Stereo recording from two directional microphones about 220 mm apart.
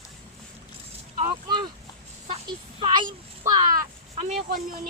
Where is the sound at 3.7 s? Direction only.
35° right (ahead or behind).